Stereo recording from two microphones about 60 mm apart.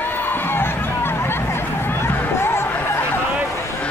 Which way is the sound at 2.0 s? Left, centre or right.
Left.